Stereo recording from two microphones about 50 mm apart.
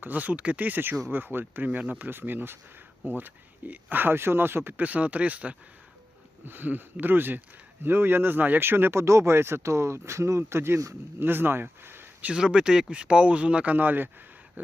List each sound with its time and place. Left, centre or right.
0.0 s speech: right
4.8 s speech: right
6.4 s speech: right
9.0 s speech: right
11.2 s speech: right
12.3 s speech: centre
13.7 s speech: right